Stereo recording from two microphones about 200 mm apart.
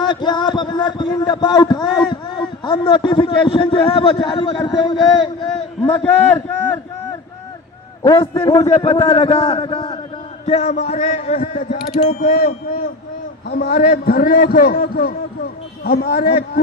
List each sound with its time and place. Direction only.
0.0 s a man's voice: 20° left (ahead or behind)
5.8 s a man's voice: 5° left (ahead or behind)
8.0 s a man's voice: 25° left (ahead or behind)
12.3 s a man's voice: 50° left (ahead or behind)